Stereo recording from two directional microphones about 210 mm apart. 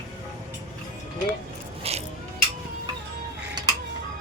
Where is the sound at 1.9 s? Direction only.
30° right (ahead or behind).